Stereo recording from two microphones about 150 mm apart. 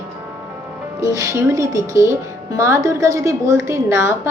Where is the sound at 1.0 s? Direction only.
25° right (ahead or behind).